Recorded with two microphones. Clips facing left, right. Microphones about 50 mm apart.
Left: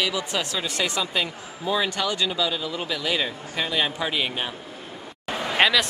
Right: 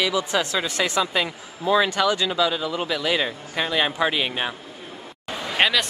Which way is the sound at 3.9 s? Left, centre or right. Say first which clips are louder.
Right 3 dB; right.